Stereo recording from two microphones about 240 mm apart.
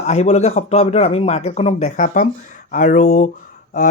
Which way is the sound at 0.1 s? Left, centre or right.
Left.